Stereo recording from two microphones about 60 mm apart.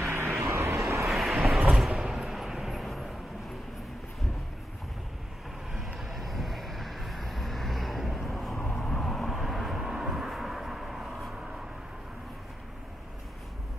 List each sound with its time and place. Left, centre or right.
0.0 s vehicle: right
1.0 s vehicle: centre
1.7 s a sound: centre
2.0 s vehicle: centre
5.9 s vehicle: centre